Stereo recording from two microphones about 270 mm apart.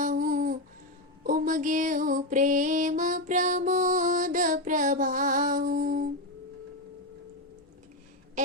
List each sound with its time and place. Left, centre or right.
0.0 s humming: right
1.2 s music: right